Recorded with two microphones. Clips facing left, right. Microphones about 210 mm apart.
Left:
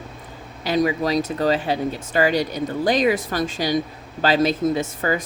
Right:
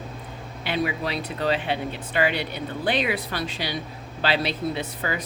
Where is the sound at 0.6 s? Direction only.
40° left (ahead or behind).